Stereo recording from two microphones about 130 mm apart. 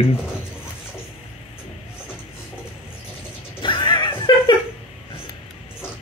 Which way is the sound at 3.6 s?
35° left (ahead or behind).